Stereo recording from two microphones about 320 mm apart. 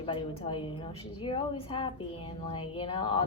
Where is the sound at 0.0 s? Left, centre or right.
Centre.